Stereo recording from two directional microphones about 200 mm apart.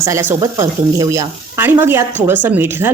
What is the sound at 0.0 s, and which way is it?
A woman's voice, 15° right (ahead or behind).